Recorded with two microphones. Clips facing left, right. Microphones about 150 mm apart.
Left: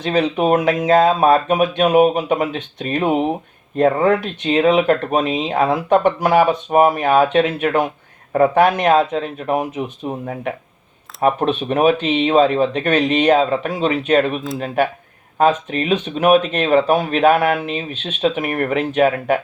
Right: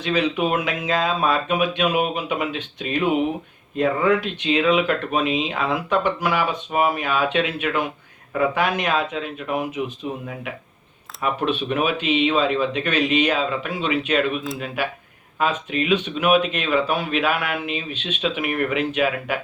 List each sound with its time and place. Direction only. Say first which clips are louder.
0.0 s a man's voice: left 4 dB; 45° left (ahead or behind)